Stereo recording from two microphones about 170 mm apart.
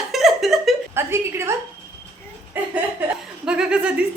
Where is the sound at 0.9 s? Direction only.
15° right (ahead or behind).